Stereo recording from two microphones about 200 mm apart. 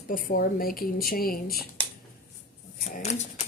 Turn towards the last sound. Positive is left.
turn(degrees=35)  # may be behind; listen again after turning